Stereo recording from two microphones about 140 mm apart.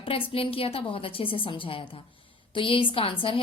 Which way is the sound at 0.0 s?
40° left (ahead or behind).